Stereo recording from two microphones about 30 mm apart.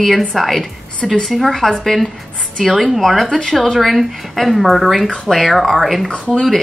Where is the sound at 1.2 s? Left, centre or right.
Centre.